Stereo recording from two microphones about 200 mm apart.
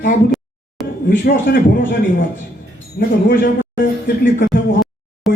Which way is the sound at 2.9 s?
50° left (ahead or behind).